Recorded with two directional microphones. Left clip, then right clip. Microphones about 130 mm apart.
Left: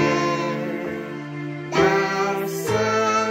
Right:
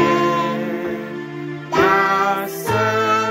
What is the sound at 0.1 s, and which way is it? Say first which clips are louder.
Music: right 5 dB; 5° left (ahead or behind).